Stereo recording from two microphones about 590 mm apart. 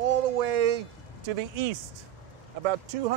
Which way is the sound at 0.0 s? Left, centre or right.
Right.